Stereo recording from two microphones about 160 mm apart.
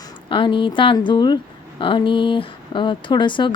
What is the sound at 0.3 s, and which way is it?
Speech, 30° left (ahead or behind).